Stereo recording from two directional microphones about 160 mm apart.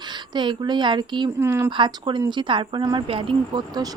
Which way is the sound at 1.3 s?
15° right (ahead or behind).